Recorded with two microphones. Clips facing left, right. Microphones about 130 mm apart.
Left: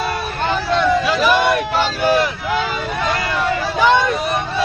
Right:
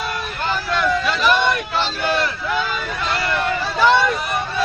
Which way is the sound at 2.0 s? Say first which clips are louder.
Left 6 dB; 10° left (ahead or behind).